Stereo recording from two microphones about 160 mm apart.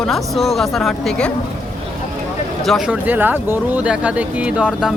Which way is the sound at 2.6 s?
5° right (ahead or behind).